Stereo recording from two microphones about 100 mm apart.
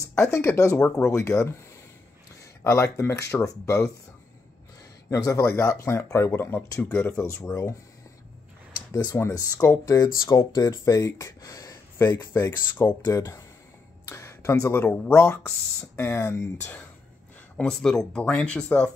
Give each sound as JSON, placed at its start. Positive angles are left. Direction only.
{"t": 0.0, "sound": "speech", "side_deg": 25}
{"t": 2.6, "sound": "speech", "side_deg": 30}
{"t": 5.1, "sound": "speech", "side_deg": 30}
{"t": 8.9, "sound": "speech", "side_deg": 30}
{"t": 10.0, "sound": "speech", "side_deg": 45}
{"t": 17.6, "sound": "speech", "side_deg": 5}